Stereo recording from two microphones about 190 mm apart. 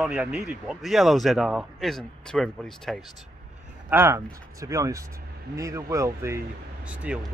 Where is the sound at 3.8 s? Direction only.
10° right (ahead or behind).